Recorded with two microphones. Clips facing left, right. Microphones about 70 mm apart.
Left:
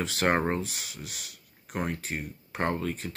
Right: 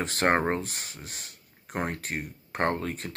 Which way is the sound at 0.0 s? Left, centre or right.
Right.